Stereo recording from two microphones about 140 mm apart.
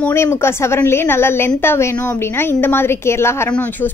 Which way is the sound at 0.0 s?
20° left (ahead or behind).